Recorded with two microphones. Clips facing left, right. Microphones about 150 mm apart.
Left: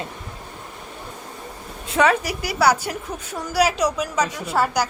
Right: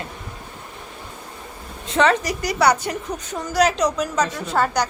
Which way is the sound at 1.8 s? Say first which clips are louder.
Right 1 dB; 10° left (ahead or behind).